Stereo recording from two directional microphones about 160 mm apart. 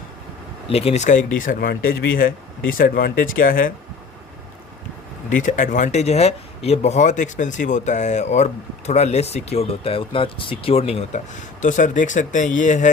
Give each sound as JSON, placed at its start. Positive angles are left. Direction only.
{"t": 0.7, "sound": "speech", "side_deg": 40}
{"t": 5.3, "sound": "speech", "side_deg": 55}